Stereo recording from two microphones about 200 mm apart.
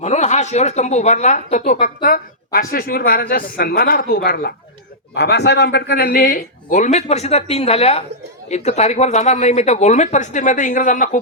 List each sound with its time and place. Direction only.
0.0 s a woman's voice: 35° left (ahead or behind)